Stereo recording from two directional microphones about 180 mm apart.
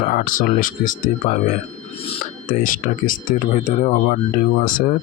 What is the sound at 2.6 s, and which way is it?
Speech, 50° left (ahead or behind).